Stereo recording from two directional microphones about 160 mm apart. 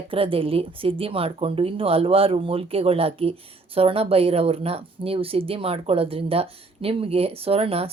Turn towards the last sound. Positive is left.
turn(degrees=-35)  # may be behind; listen again after turning